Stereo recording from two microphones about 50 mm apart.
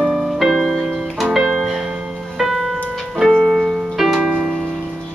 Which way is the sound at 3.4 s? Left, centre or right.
Centre.